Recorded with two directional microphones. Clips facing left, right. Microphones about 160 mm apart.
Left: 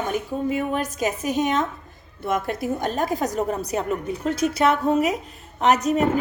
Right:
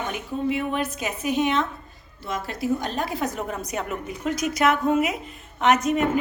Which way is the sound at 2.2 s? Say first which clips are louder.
Left 3 dB; 55° left (ahead or behind).